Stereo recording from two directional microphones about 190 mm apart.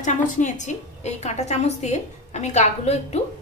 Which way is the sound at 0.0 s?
40° left (ahead or behind).